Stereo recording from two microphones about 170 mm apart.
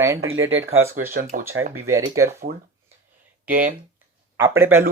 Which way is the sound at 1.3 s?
55° right (ahead or behind).